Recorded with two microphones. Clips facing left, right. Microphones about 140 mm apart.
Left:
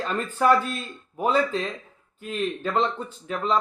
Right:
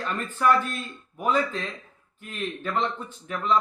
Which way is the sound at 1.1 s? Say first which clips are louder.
Left 2 dB; 30° left (ahead or behind).